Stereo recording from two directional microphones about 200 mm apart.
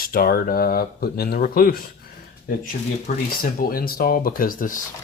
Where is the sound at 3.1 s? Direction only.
45° left (ahead or behind).